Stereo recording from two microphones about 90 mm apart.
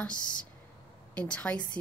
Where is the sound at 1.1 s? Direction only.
15° left (ahead or behind).